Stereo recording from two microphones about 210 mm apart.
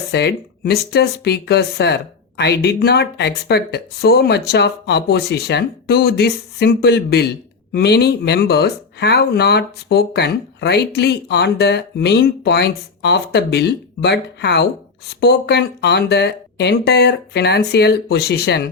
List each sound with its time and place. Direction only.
0.1 s speech: 55° left (ahead or behind)